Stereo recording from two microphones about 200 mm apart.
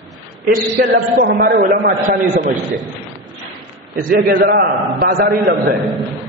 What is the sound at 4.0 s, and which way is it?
A man's voice, 45° right (ahead or behind).